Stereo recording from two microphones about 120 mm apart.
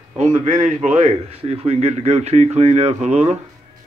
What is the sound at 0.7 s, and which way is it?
A man's voice, 75° right (ahead or behind).